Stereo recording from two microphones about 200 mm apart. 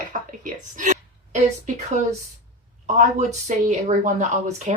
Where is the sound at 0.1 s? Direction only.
40° right (ahead or behind).